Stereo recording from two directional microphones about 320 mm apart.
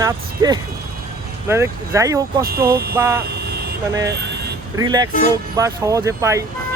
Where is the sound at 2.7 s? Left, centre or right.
Right.